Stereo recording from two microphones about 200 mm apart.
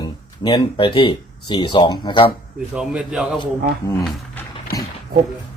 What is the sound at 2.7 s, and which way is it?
Speech, 5° right (ahead or behind).